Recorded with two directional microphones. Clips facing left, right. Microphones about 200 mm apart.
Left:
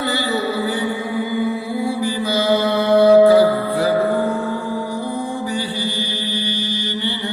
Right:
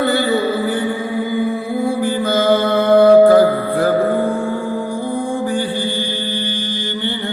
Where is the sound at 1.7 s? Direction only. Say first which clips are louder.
Right 3 dB; 50° right (ahead or behind).